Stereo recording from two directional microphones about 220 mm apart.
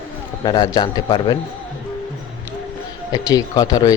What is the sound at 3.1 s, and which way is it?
Speech, 15° left (ahead or behind).